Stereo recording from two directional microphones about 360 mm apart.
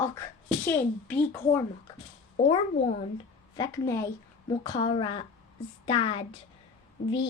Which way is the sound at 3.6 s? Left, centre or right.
Centre.